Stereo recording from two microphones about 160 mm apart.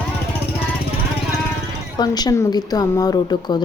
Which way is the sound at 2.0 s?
25° left (ahead or behind).